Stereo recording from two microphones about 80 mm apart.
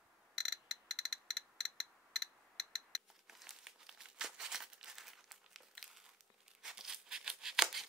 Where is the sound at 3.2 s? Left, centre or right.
Centre.